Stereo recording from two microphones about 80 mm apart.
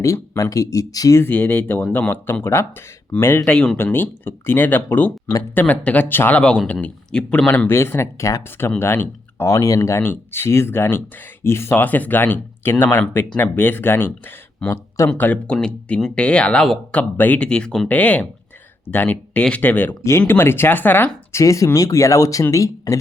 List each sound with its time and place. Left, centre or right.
0.0 s speech: left
1.2 s speech: left
3.4 s speech: centre
3.8 s speech: left
6.4 s speech: centre
7.7 s speech: left
9.6 s speech: left
10.0 s speech: left
14.7 s speech: left
15.2 s speech: centre
15.5 s speech: centre
20.1 s speech: left
21.4 s speech: left